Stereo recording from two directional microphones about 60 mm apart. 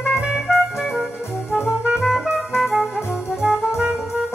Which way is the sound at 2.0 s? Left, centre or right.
Centre.